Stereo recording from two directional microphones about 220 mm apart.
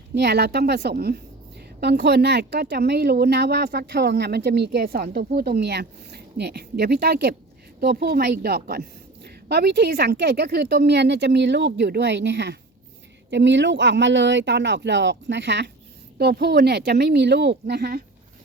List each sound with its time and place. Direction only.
0.2 s speech: 50° right (ahead or behind)